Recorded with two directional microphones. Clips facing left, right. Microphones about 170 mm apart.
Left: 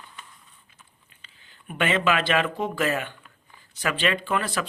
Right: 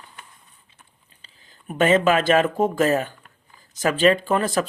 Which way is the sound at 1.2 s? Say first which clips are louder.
Right 4 dB; 40° right (ahead or behind).